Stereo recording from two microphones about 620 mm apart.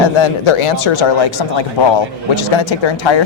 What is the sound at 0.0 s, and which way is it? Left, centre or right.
Speech, left.